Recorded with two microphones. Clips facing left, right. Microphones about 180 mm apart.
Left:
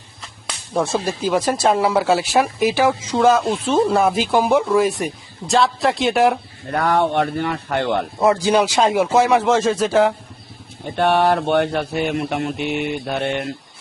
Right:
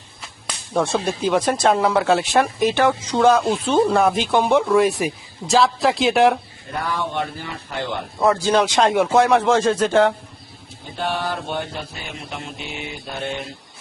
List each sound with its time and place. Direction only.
0.2 s speech: centre (ahead or behind)
6.7 s speech: 65° left (ahead or behind)
8.2 s speech: 15° left (ahead or behind)
10.9 s speech: 65° left (ahead or behind)